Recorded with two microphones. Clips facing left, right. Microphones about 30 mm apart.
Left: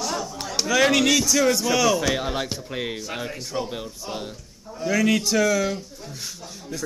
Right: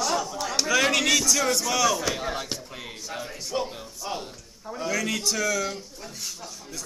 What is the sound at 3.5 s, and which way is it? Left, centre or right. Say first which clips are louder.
Speech: even; centre.